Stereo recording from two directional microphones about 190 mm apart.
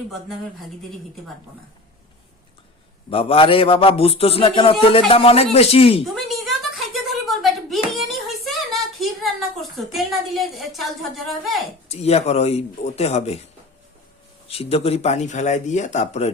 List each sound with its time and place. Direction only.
3.1 s a man's voice: 30° left (ahead or behind)
6.1 s a sound: centre (ahead or behind)
11.9 s speech: 35° left (ahead or behind)
14.4 s speech: 30° left (ahead or behind)